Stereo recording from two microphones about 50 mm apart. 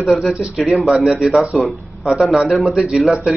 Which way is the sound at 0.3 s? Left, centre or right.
Centre.